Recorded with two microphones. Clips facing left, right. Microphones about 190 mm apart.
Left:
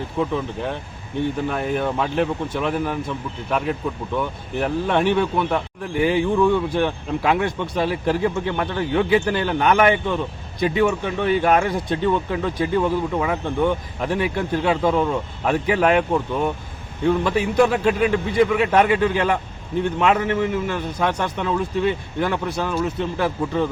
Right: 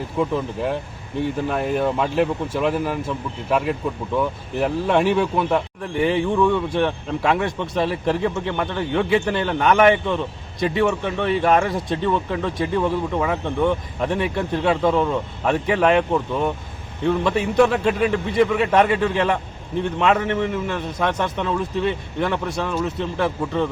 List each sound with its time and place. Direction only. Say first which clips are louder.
0.2 s a man's voice: right 1 dB; 5° right (ahead or behind)
4.5 s a man's voice: right 1 dB; centre (ahead or behind)